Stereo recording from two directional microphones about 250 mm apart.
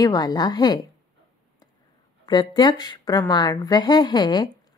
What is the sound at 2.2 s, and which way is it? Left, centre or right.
A woman's voice, centre.